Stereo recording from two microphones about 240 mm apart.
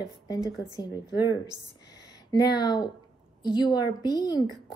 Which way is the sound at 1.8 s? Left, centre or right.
Left.